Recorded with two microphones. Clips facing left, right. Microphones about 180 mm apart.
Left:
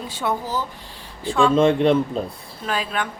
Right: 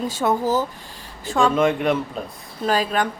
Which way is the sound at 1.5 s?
30° left (ahead or behind).